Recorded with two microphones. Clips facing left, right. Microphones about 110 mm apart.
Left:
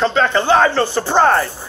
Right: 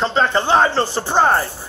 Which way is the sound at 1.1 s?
10° right (ahead or behind).